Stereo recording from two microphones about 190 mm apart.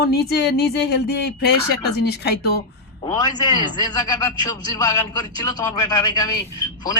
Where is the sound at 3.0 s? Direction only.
20° left (ahead or behind).